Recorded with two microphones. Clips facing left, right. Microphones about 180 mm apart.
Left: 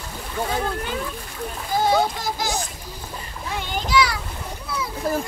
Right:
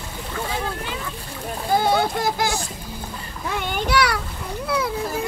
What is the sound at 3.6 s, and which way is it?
Speech, 60° right (ahead or behind).